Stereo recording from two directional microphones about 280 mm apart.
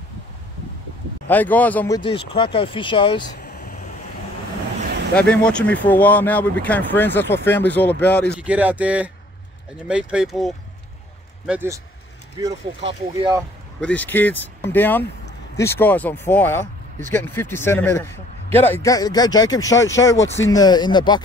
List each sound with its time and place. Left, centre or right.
1.3 s speech: centre
2.0 s a man's voice: centre
3.4 s a sound: left
5.3 s speech: centre
8.4 s speech: centre
13.7 s a man's voice: centre